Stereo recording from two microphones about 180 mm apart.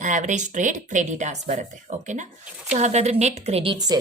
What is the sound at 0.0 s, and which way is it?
Speech, 45° right (ahead or behind).